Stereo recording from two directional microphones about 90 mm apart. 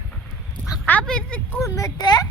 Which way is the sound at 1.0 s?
10° left (ahead or behind).